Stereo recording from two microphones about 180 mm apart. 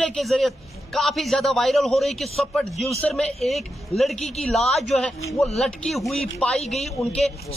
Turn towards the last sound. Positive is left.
turn(degrees=0)  # may be behind; listen again after turning